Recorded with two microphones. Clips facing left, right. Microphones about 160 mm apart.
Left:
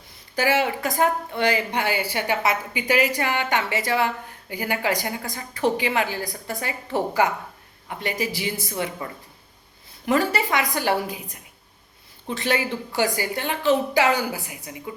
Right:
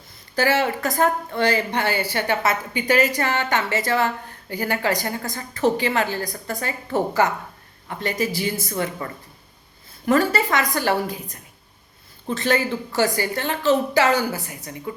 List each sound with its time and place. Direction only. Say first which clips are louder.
0.3 s speech: right 1 dB; 15° left (ahead or behind)
10.1 s speech: right 2 dB; 15° left (ahead or behind)